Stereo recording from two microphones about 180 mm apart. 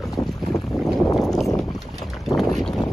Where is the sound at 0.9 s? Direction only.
Centre (ahead or behind).